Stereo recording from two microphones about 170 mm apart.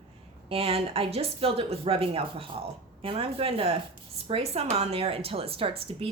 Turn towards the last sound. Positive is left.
turn(degrees=-35)  # may be behind; listen again after turning